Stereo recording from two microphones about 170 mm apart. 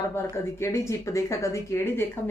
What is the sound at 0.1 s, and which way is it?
A woman's voice, 15° left (ahead or behind).